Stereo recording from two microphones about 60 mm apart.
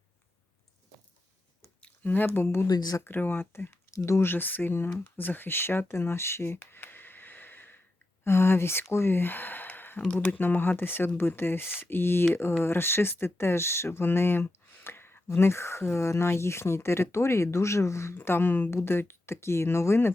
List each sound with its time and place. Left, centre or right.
2.0 s speech: left
2.6 s speech: left
3.0 s speech: left
3.9 s speech: left
18.2 s speech: left